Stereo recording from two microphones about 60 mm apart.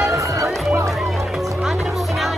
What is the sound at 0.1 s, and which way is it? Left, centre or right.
Music, right.